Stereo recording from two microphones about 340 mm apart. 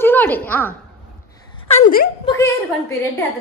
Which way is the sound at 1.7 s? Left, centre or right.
Left.